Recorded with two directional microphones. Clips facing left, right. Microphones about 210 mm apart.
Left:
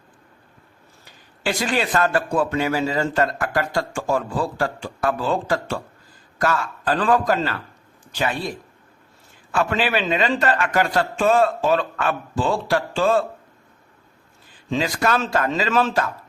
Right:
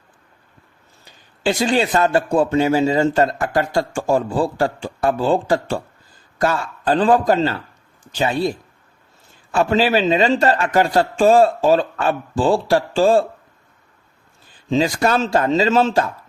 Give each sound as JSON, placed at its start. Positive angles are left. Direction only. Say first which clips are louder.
{"t": 1.5, "sound": "a man's voice", "louder": "right 5 dB", "side_deg": -25}
{"t": 14.7, "sound": "speech", "louder": "right 4 dB", "side_deg": -30}